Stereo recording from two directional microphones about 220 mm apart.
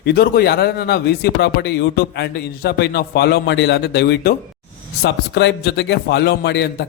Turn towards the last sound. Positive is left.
turn(degrees=50)  # may be behind; listen again after turning